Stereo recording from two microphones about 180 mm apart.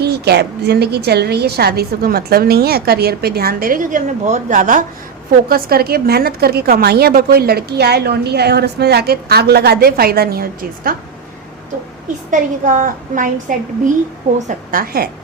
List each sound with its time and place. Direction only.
0.0 s a woman's voice: 65° right (ahead or behind)
12.3 s a woman's voice: 45° right (ahead or behind)